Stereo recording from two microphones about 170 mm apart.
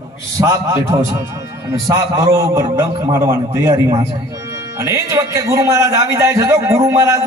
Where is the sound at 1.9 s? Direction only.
20° right (ahead or behind).